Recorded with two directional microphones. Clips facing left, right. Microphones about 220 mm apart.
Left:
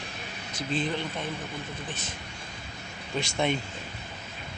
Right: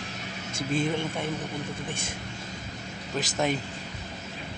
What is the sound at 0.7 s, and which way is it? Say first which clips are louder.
Speech: right 3 dB; 10° right (ahead or behind).